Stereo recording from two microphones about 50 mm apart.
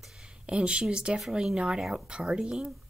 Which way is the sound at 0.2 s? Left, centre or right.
Right.